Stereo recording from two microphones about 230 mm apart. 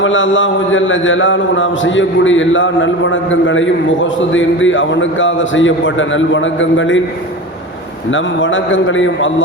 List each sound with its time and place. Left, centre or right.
0.0 s a man's voice: left
8.1 s a man's voice: left